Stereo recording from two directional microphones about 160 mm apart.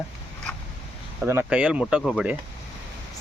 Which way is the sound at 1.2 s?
15° right (ahead or behind).